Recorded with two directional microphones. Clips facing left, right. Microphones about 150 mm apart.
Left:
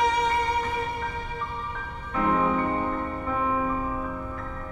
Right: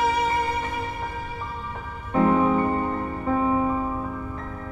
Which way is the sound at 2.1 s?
30° right (ahead or behind).